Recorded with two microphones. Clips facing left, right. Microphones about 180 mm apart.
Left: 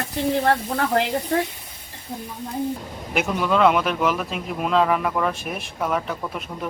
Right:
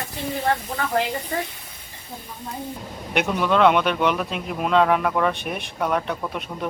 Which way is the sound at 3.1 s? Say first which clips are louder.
Right 1 dB; centre (ahead or behind).